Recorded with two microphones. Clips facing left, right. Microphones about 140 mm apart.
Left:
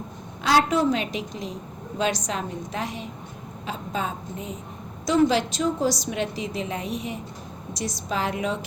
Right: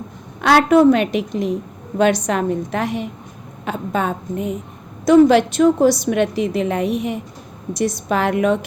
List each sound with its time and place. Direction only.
0.4 s a woman's voice: 60° right (ahead or behind)